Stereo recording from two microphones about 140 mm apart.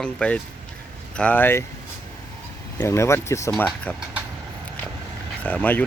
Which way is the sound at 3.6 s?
10° left (ahead or behind).